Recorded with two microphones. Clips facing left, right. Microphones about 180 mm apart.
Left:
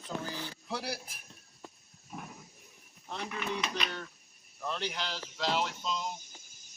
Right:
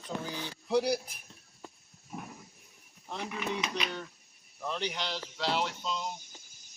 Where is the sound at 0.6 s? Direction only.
15° right (ahead or behind).